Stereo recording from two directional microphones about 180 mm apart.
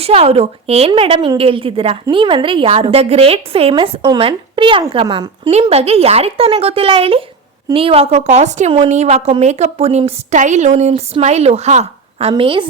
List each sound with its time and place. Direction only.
0.0 s a woman's voice: 35° right (ahead or behind)
5.5 s a woman's voice: 35° right (ahead or behind)